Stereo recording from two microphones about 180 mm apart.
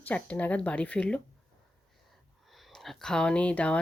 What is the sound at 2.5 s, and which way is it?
Speech, centre (ahead or behind).